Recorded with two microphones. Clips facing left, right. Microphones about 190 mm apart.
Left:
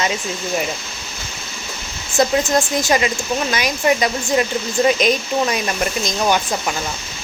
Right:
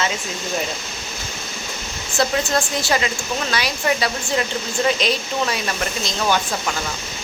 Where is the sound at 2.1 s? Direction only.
20° left (ahead or behind).